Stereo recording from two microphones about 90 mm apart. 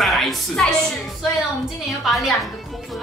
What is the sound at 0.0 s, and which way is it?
A woman's voice, centre (ahead or behind).